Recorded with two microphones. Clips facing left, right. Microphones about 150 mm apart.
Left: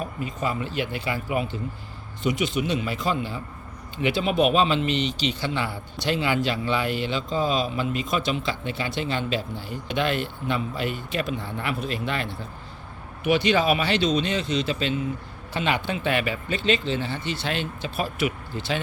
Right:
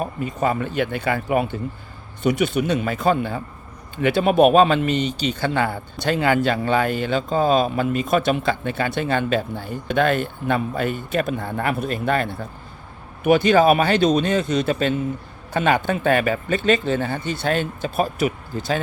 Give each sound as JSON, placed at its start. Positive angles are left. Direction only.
{"t": 0.0, "sound": "speech", "side_deg": -45}